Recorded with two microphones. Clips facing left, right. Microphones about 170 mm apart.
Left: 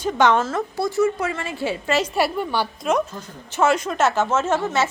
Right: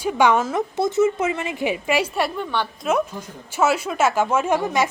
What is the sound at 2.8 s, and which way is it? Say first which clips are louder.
A woman's voice: right 2 dB; 10° right (ahead or behind).